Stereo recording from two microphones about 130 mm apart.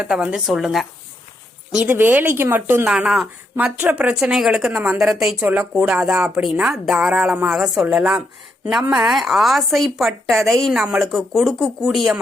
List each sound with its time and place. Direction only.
0.0 s speech: 5° right (ahead or behind)
1.7 s speech: 15° right (ahead or behind)